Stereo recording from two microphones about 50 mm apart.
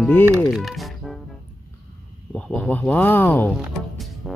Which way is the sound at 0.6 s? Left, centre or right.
Centre.